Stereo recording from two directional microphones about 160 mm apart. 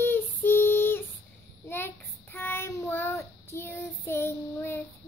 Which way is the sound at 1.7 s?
15° left (ahead or behind).